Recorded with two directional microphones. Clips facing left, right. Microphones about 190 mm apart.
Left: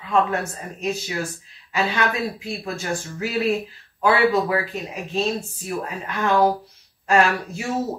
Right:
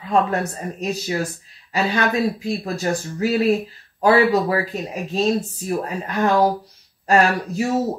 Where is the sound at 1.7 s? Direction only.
35° right (ahead or behind).